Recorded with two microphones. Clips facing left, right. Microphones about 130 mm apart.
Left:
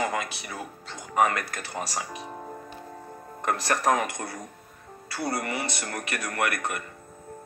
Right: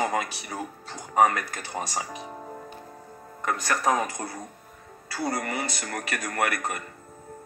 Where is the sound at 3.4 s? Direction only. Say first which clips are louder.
Left 1 dB; 50° left (ahead or behind).